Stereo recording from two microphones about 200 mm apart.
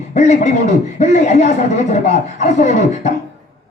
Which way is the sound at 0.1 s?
35° left (ahead or behind).